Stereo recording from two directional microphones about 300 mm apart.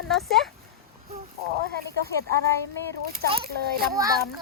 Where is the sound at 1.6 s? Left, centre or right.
Right.